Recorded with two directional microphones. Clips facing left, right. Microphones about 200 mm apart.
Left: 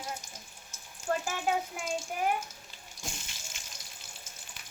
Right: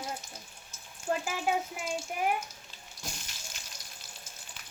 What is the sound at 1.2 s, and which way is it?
Speech, 5° right (ahead or behind).